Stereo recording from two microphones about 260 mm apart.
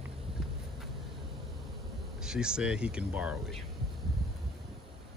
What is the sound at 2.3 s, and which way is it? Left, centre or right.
Speech, centre.